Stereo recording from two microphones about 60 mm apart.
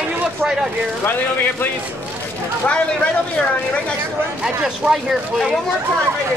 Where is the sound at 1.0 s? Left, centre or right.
Left.